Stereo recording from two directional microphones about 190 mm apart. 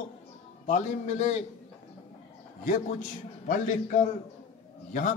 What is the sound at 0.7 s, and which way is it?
Speech, 40° left (ahead or behind).